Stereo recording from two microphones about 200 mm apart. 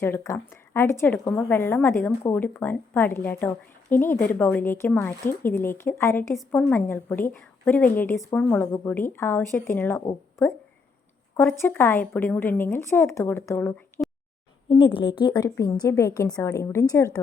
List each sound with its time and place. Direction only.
0.0 s speech: 10° left (ahead or behind)
14.7 s speech: 25° left (ahead or behind)